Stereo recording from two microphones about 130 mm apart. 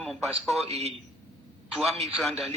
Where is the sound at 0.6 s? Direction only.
55° right (ahead or behind).